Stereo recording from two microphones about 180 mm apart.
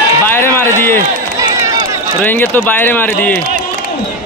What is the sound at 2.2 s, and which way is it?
Speech, 10° left (ahead or behind).